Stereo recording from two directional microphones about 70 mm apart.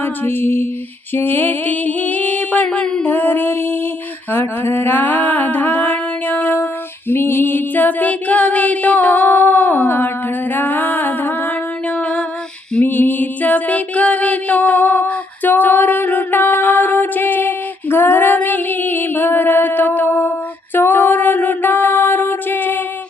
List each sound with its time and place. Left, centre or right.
0.0 s female singing: left
1.1 s mantra: left
2.6 s a sound: centre
3.0 s mantra: left
4.3 s music: left